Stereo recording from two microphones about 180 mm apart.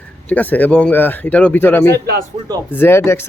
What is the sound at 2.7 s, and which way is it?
Speech, 10° left (ahead or behind).